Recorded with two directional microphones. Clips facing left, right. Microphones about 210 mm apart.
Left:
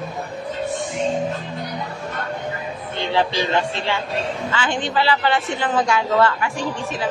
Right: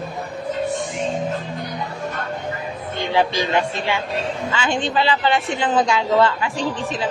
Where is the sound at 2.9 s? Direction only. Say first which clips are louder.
Right 1 dB; 15° right (ahead or behind).